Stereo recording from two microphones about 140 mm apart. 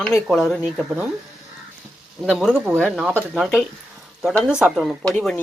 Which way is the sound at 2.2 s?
Centre (ahead or behind).